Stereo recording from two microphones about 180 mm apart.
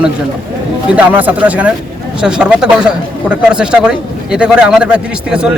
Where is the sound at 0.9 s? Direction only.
10° right (ahead or behind).